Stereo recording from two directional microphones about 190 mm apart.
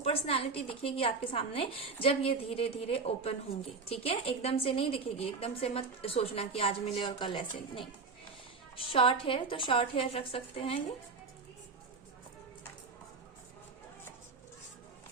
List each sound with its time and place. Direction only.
0.0 s a woman's voice: 30° left (ahead or behind)